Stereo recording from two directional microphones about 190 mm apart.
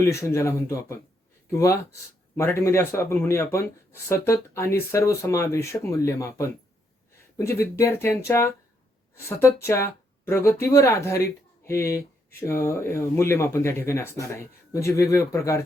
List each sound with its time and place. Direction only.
0.0 s speech: 15° left (ahead or behind)